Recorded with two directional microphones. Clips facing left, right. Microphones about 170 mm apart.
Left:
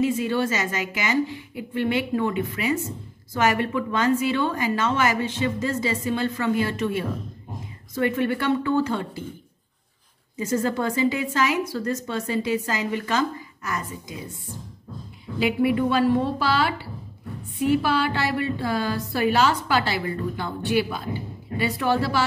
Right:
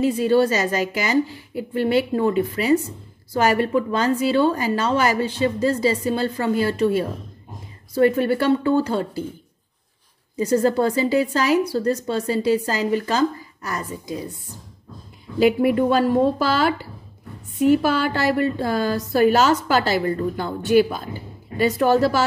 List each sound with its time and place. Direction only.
0.0 s a woman's voice: 35° right (ahead or behind)
10.3 s a woman's voice: 35° right (ahead or behind)
15.3 s a woman's voice: 45° right (ahead or behind)